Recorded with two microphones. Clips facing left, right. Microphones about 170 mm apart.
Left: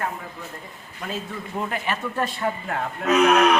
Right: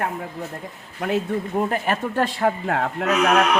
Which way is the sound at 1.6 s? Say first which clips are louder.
Right 3 dB; 45° right (ahead or behind).